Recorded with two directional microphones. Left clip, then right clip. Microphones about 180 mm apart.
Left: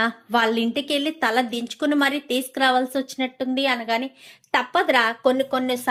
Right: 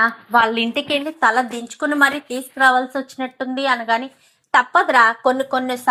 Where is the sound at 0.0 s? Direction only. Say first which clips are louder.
Right 5 dB; 30° left (ahead or behind).